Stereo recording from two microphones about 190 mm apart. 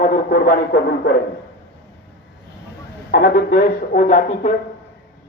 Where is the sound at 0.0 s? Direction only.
45° left (ahead or behind).